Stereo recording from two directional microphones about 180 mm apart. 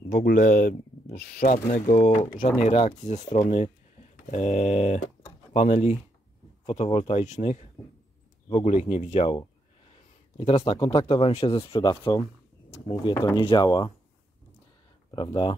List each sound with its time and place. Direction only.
0.1 s speech: 50° left (ahead or behind)
5.2 s a sound: 35° left (ahead or behind)
6.6 s speech: 35° left (ahead or behind)
15.0 s speech: 20° left (ahead or behind)